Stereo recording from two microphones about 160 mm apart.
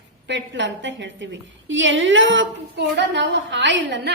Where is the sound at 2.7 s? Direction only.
90° right.